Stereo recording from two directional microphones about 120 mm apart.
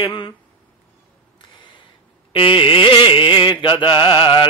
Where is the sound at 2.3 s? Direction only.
45° left (ahead or behind).